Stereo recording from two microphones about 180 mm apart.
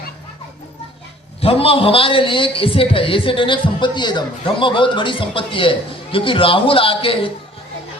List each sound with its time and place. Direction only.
1.4 s a man's voice: 30° left (ahead or behind)